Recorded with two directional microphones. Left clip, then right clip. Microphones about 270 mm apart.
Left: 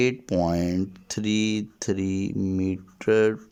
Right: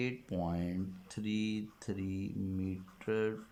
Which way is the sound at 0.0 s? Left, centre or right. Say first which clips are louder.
Left 15 dB; left.